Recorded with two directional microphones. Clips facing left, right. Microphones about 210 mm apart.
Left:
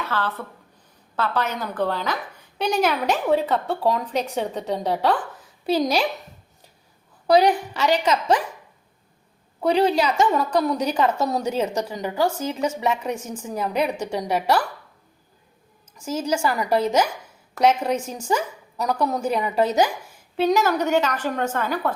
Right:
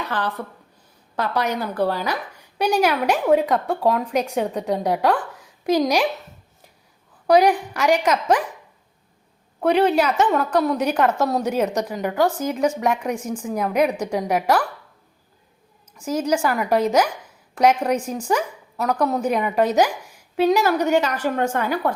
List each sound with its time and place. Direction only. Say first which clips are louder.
0.0 s a woman's voice: right 1 dB; 15° right (ahead or behind)
7.3 s a woman's voice: right 1 dB; 10° right (ahead or behind)
9.6 s a woman's voice: right 2 dB; 10° right (ahead or behind)
16.5 s a woman's voice: right 2 dB; 10° right (ahead or behind)